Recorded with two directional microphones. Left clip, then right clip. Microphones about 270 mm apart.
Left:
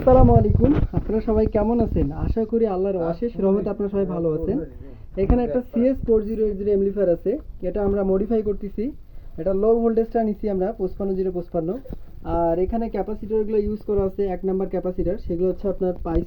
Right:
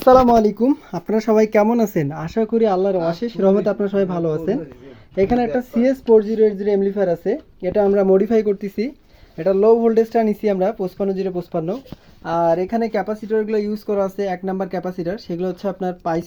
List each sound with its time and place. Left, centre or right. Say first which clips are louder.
0.0 s speech: right 4 dB; right